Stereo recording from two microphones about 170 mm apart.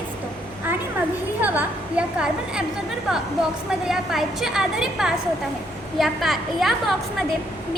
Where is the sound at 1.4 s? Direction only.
10° right (ahead or behind).